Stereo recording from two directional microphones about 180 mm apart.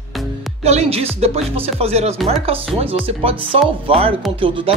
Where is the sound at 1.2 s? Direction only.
35° right (ahead or behind).